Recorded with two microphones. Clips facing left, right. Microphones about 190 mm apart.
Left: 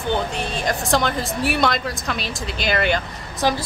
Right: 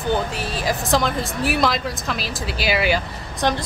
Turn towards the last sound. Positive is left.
turn(degrees=5)  # may be behind; listen again after turning